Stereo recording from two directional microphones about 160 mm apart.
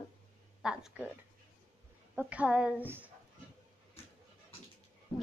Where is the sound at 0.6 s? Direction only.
5° right (ahead or behind).